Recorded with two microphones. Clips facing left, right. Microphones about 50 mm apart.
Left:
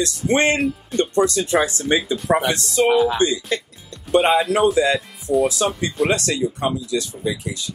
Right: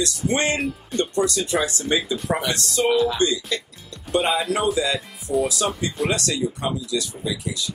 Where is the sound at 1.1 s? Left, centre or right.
Left.